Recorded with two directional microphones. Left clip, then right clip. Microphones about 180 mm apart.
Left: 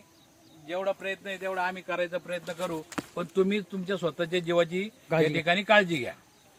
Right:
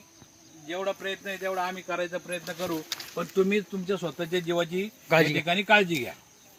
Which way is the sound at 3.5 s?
25° left (ahead or behind).